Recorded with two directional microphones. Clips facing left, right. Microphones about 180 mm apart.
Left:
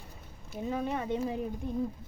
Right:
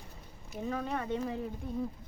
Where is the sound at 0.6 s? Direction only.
15° left (ahead or behind).